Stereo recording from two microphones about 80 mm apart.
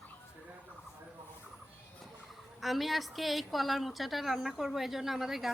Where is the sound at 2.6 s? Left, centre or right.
Centre.